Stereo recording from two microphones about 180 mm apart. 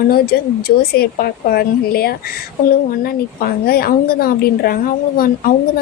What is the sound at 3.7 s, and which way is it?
A woman's voice, 55° left (ahead or behind).